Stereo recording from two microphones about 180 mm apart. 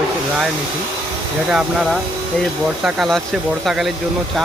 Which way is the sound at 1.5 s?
5° right (ahead or behind).